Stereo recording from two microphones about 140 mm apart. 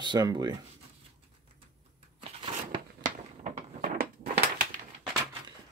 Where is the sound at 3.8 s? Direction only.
90° right.